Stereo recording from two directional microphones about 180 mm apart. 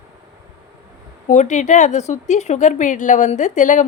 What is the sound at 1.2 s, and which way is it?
A woman's voice, 45° left (ahead or behind).